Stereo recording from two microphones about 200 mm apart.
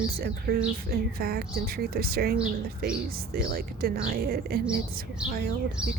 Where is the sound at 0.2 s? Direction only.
50° right (ahead or behind).